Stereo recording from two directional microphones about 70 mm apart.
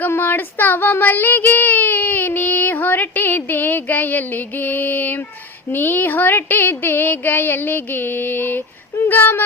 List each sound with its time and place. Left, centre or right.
0.0 s child singing: left